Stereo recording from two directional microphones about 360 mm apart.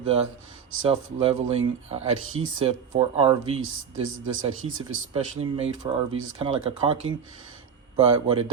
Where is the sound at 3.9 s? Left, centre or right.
Right.